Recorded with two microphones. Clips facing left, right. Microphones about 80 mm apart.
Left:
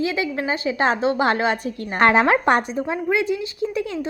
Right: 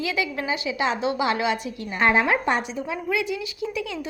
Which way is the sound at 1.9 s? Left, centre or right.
Left.